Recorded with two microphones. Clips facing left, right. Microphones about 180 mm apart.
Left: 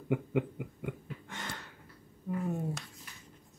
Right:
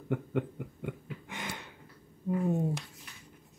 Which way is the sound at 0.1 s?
5° left (ahead or behind).